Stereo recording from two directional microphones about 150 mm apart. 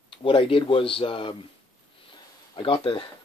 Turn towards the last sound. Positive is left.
turn(degrees=30)  # may be behind; listen again after turning